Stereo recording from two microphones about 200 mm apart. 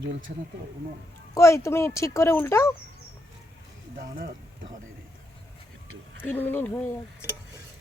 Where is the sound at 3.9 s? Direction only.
45° right (ahead or behind).